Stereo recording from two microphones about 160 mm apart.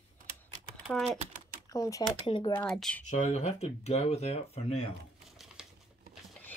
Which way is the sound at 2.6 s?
5° left (ahead or behind).